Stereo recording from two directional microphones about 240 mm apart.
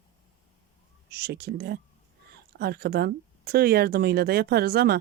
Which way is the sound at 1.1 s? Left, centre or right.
Right.